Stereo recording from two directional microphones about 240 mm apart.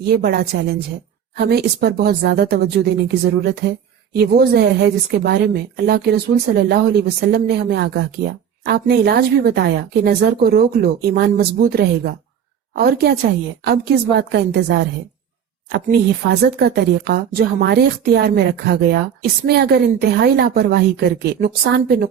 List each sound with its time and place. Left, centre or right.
0.2 s a woman's voice: right
4.1 s a woman's voice: right